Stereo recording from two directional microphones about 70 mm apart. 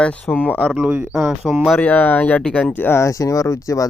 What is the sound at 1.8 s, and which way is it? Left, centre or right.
Speech, left.